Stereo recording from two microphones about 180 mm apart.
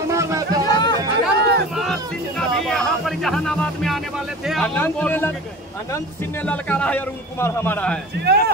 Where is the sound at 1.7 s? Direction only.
Centre (ahead or behind).